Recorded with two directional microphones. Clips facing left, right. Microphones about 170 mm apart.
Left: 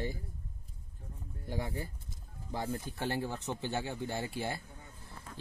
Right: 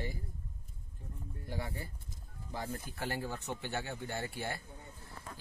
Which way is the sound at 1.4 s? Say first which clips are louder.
Left 4 dB; 20° left (ahead or behind).